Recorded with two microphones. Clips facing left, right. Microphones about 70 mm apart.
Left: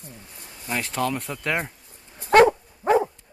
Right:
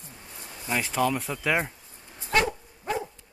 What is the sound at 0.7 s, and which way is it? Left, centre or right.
Speech, centre.